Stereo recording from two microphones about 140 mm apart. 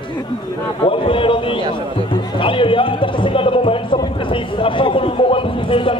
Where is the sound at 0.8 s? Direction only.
40° left (ahead or behind).